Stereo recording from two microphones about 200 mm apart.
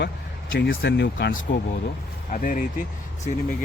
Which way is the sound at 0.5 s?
60° left (ahead or behind).